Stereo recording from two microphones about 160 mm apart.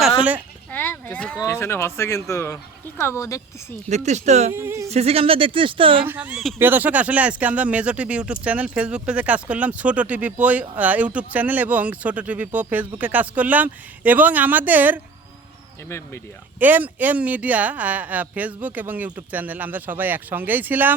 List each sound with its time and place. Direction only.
0.7 s a sound: 10° left (ahead or behind)
1.4 s speech: 15° left (ahead or behind)
3.8 s speech: 45° right (ahead or behind)
4.5 s speech: 15° right (ahead or behind)
4.9 s speech: 40° right (ahead or behind)
6.1 s speech: 10° right (ahead or behind)
15.9 s speech: 15° left (ahead or behind)
16.6 s speech: 10° right (ahead or behind)